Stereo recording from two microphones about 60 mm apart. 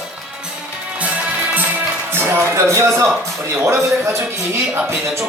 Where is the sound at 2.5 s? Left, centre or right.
Right.